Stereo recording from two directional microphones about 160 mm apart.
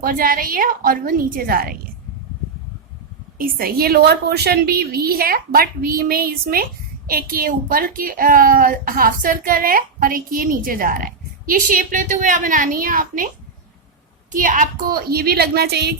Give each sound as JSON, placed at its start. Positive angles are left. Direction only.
{"t": 0.0, "sound": "a woman's voice", "side_deg": -60}
{"t": 3.3, "sound": "a woman's voice", "side_deg": -65}
{"t": 14.3, "sound": "a woman's voice", "side_deg": -55}